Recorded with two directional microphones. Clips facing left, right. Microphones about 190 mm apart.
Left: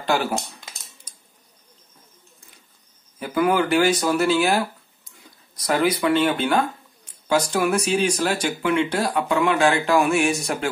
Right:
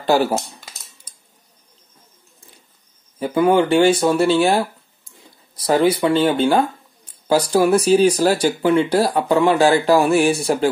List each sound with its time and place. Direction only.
0.0 s speech: 35° right (ahead or behind)
3.2 s speech: 25° right (ahead or behind)